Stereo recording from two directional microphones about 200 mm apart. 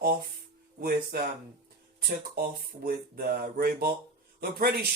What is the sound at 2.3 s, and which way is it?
Speech, 50° right (ahead or behind).